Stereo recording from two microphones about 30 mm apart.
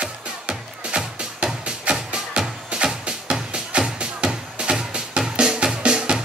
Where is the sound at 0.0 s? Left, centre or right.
Right.